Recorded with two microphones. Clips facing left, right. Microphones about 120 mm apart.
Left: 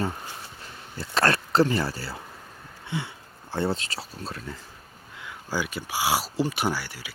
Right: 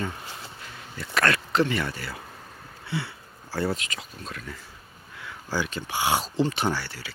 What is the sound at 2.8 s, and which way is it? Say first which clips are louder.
Speech: even; 20° left (ahead or behind).